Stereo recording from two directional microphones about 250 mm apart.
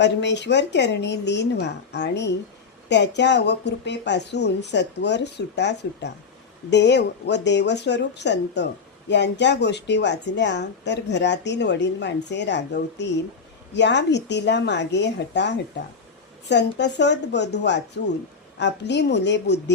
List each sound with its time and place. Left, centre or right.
0.0 s a woman's voice: left